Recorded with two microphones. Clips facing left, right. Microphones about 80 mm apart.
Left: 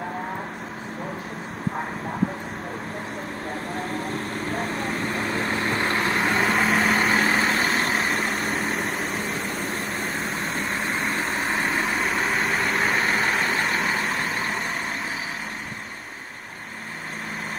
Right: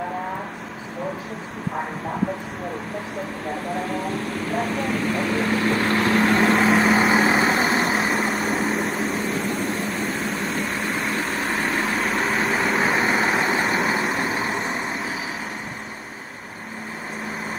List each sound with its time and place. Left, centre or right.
4.3 s vehicle: left
5.2 s vehicle: left
6.1 s vehicle: centre